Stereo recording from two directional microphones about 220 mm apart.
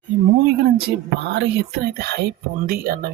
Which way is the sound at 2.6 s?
45° right (ahead or behind).